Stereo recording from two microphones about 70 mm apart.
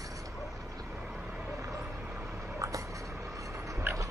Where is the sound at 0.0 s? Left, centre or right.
Right.